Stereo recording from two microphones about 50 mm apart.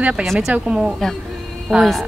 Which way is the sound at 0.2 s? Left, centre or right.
Centre.